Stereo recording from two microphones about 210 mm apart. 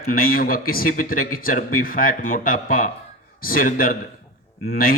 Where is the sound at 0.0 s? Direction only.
45° left (ahead or behind).